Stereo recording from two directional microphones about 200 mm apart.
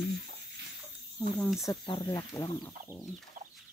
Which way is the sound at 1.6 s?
20° left (ahead or behind).